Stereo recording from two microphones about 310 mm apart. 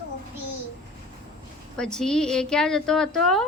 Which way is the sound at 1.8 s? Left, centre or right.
Centre.